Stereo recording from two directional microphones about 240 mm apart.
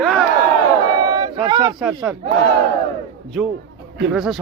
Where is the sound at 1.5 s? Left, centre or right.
Centre.